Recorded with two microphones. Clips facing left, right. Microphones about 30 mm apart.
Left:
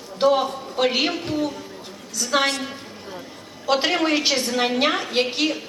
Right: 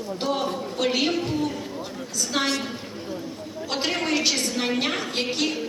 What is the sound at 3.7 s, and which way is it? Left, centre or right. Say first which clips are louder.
A woman's voice: left 6 dB; left.